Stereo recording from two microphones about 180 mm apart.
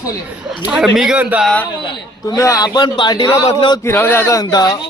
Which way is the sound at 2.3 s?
20° left (ahead or behind).